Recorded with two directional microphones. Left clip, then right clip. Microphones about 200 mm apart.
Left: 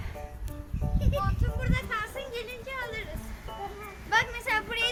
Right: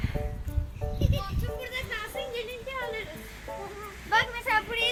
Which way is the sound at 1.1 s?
45° left (ahead or behind).